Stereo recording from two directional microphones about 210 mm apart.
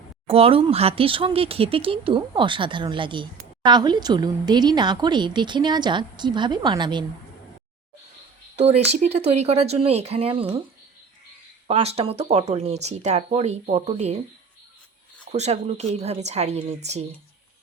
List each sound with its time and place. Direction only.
0.3 s a woman's voice: 25° right (ahead or behind)
8.5 s a woman's voice: 30° right (ahead or behind)
11.7 s speech: 30° right (ahead or behind)
15.3 s speech: 30° right (ahead or behind)